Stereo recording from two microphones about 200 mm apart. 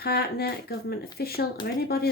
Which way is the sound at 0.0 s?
50° left (ahead or behind).